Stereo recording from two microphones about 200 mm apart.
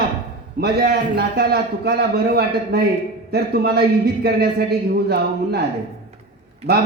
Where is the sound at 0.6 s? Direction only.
55° right (ahead or behind).